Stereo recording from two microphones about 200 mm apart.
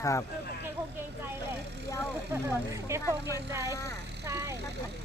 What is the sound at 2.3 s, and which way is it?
Speech, 15° right (ahead or behind).